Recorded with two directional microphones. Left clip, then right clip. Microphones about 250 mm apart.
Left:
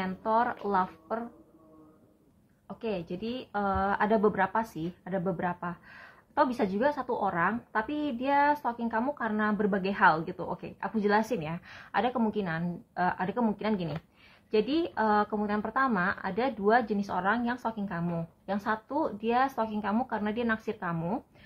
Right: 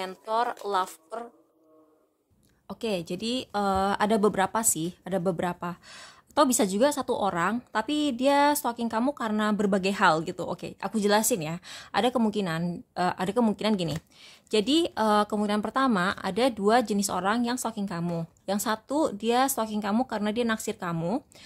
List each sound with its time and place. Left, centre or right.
0.0 s speech: right
2.7 s speech: right